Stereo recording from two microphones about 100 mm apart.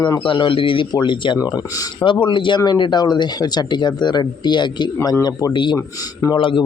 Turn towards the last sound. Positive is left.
turn(degrees=55)  # may be behind; listen again after turning